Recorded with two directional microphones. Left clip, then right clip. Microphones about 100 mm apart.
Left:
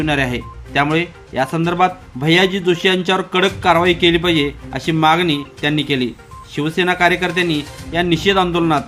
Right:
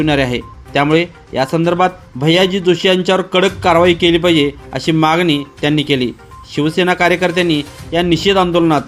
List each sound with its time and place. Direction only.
0.0 s speech: 40° right (ahead or behind)